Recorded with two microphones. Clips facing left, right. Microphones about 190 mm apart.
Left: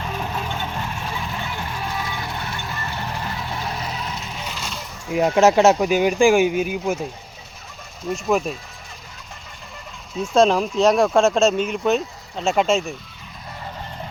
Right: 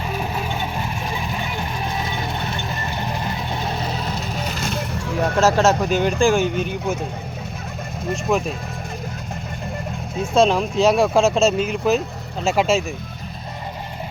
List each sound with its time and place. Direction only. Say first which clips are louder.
0.0 s vehicle: right 2 dB; 10° right (ahead or behind); by 5.1 s 65° right (ahead or behind)
5.2 s speech: left 2 dB; 15° left (ahead or behind)
8.1 s speech: even; centre (ahead or behind)
10.3 s speech: even; centre (ahead or behind)